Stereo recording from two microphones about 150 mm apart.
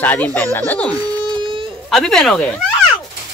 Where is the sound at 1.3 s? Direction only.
35° right (ahead or behind).